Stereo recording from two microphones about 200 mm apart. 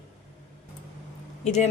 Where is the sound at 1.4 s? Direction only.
35° left (ahead or behind).